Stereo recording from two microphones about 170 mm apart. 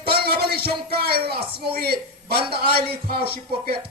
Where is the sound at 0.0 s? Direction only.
65° right (ahead or behind).